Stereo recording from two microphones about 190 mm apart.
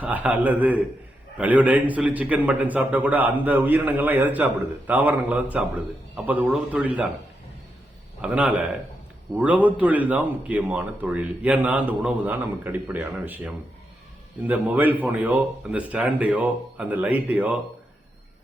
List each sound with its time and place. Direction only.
0.0 s a man's voice: 10° right (ahead or behind)
8.2 s a man's voice: 5° right (ahead or behind)